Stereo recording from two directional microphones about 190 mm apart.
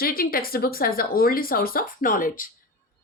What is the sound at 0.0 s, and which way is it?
Speech, 50° left (ahead or behind).